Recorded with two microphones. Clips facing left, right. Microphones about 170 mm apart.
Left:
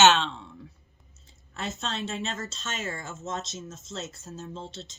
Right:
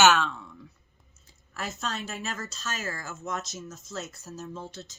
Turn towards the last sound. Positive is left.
turn(degrees=25)  # may be behind; listen again after turning